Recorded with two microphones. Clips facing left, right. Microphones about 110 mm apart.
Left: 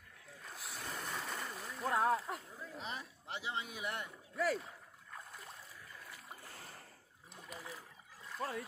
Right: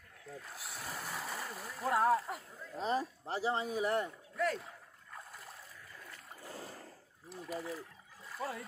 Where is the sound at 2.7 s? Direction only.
35° right (ahead or behind).